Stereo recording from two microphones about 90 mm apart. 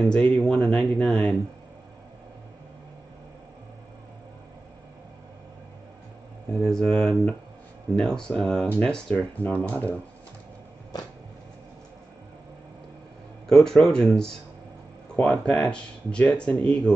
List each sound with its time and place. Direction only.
0.0 s speech: 5° left (ahead or behind)
6.6 s speech: 5° left (ahead or behind)
8.6 s speech: 20° left (ahead or behind)
13.5 s speech: 5° left (ahead or behind)
15.4 s speech: 10° left (ahead or behind)